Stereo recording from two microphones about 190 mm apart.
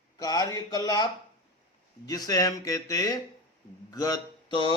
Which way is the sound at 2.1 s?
20° left (ahead or behind).